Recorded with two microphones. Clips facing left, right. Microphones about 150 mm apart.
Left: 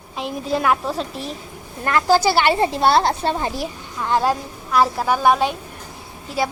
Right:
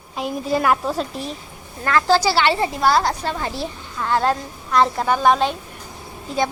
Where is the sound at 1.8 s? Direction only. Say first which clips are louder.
Left 1 dB; 15° left (ahead or behind).